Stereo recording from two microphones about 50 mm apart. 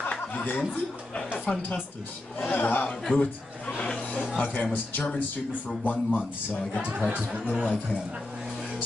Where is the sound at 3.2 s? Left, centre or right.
Left.